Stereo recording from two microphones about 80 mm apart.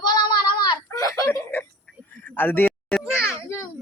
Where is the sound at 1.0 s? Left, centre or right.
Left.